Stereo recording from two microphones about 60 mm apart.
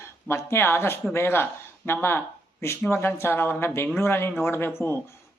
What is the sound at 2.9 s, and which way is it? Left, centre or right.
Speech, left.